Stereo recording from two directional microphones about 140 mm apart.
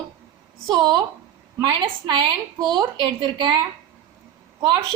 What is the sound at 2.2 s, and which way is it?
A woman's voice, 35° right (ahead or behind).